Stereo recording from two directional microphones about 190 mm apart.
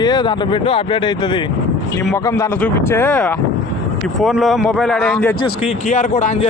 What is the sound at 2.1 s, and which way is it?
Speech, 15° left (ahead or behind).